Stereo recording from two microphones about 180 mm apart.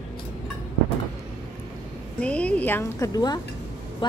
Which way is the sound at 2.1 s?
5° left (ahead or behind).